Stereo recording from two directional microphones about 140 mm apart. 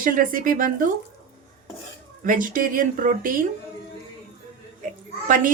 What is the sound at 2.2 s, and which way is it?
Speech, 75° right (ahead or behind).